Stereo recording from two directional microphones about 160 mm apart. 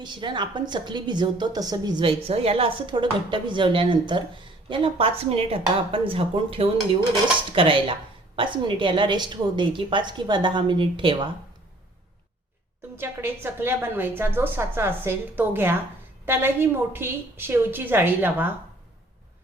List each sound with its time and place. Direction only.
0.0 s a woman's voice: 30° right (ahead or behind)
13.0 s a woman's voice: 15° right (ahead or behind)